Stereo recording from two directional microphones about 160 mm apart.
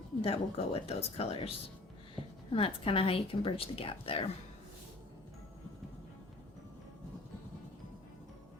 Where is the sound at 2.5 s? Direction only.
35° left (ahead or behind).